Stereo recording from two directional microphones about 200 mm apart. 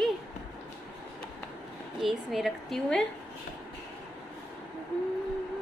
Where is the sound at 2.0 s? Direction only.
Centre (ahead or behind).